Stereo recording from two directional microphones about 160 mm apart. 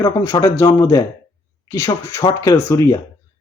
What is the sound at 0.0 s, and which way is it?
Speech, 20° left (ahead or behind).